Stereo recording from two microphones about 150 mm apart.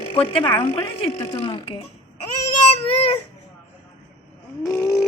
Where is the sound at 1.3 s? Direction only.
35° left (ahead or behind).